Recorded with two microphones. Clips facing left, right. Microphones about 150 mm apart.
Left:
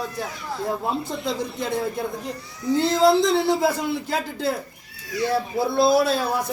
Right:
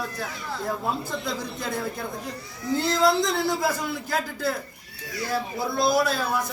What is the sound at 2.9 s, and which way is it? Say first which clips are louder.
Speech: left 5 dB; 25° left (ahead or behind).